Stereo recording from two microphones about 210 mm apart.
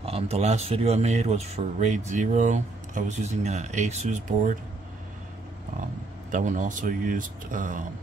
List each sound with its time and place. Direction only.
0.0 s speech: 30° right (ahead or behind)
6.3 s speech: 35° right (ahead or behind)